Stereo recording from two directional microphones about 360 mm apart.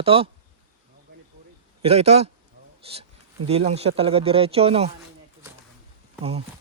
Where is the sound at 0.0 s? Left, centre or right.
Centre.